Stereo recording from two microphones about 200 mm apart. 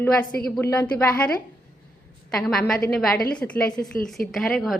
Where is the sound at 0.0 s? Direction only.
5° left (ahead or behind).